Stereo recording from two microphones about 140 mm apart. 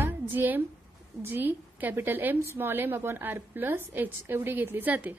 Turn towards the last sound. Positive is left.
turn(degrees=-10)  # may be behind; listen again after turning